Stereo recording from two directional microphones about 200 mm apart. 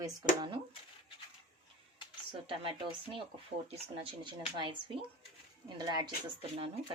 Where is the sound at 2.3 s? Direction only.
25° right (ahead or behind).